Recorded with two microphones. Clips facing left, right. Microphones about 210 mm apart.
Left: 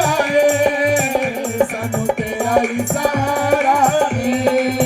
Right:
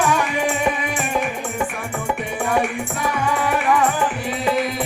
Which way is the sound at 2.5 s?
40° left (ahead or behind).